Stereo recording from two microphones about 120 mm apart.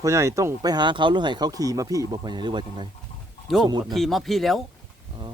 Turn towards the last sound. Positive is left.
turn(degrees=0)  # may be behind; listen again after turning